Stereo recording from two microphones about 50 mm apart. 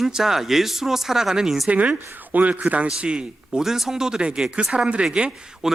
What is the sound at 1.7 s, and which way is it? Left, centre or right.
Speech, right.